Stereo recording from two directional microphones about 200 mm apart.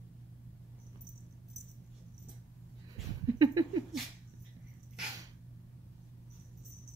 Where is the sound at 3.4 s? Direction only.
20° right (ahead or behind).